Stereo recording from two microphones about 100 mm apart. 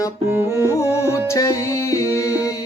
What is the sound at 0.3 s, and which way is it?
Music, 30° right (ahead or behind).